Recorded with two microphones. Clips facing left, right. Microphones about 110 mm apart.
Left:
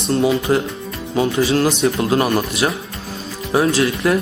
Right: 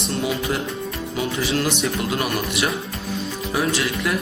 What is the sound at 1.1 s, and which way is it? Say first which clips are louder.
Speech: left 8 dB; 30° left (ahead or behind).